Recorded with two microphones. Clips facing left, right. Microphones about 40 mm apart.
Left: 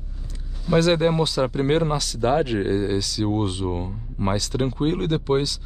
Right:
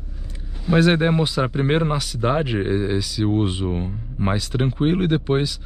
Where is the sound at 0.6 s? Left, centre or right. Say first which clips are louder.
Right 1 dB; centre.